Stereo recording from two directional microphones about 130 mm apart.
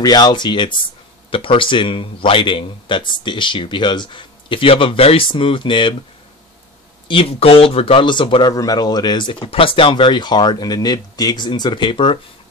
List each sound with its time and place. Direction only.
0.0 s speech: 30° left (ahead or behind)
7.1 s speech: 45° left (ahead or behind)